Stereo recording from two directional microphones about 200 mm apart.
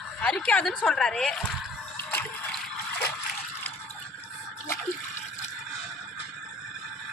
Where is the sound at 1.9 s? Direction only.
10° left (ahead or behind).